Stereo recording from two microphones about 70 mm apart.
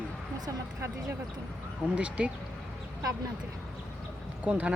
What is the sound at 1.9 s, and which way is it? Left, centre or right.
Speech, centre.